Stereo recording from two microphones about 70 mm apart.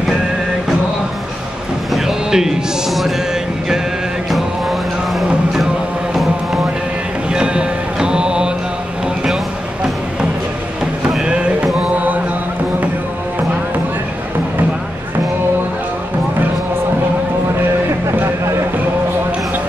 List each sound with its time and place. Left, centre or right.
2.0 s music: centre
7.3 s music: centre
11.2 s music: centre